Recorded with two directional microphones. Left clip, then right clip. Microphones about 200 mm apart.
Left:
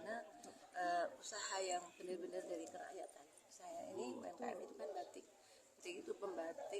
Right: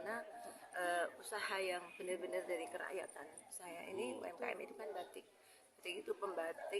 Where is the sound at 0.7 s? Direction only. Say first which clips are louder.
Right 1 dB; centre (ahead or behind).